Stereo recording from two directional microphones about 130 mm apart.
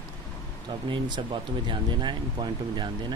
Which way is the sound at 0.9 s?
35° right (ahead or behind).